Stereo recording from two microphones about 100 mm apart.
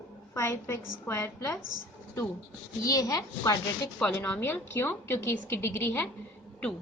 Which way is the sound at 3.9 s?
10° left (ahead or behind).